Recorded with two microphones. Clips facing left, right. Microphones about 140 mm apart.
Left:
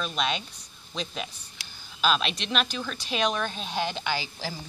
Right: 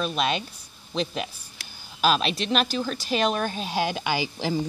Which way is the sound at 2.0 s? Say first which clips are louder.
Right 3 dB; 40° right (ahead or behind).